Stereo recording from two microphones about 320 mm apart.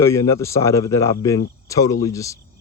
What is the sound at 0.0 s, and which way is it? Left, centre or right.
Speech, centre.